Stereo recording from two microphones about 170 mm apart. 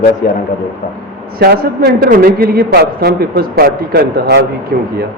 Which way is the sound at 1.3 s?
65° right (ahead or behind).